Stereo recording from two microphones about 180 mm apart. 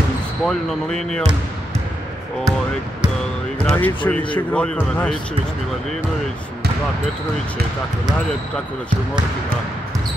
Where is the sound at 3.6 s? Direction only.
10° left (ahead or behind).